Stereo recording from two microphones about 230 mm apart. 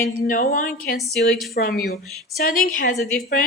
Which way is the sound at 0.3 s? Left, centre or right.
Left.